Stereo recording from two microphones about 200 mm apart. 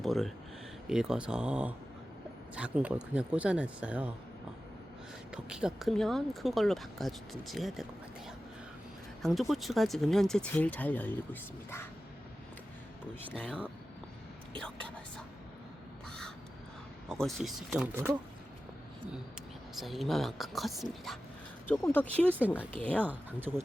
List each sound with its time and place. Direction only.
0.0 s speech: centre (ahead or behind)
5.3 s speech: 5° right (ahead or behind)
9.2 s speech: centre (ahead or behind)
13.3 s speech: 5° left (ahead or behind)
14.6 s speech: 5° left (ahead or behind)
17.1 s speech: centre (ahead or behind)
19.8 s speech: centre (ahead or behind)
22.4 s speech: 10° right (ahead or behind)
22.8 s speech: 10° left (ahead or behind)
23.0 s speech: 10° right (ahead or behind)